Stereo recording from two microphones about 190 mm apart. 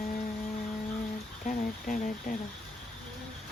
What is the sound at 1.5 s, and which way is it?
Speech, 45° left (ahead or behind).